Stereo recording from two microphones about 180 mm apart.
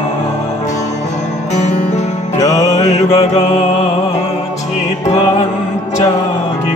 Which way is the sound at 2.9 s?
40° left (ahead or behind).